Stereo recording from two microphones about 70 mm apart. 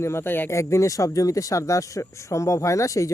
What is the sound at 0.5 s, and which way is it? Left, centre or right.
Speech, left.